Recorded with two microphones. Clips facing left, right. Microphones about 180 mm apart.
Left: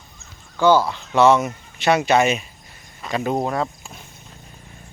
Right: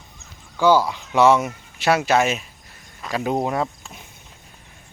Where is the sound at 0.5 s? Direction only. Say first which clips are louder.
Left 1 dB; 10° right (ahead or behind).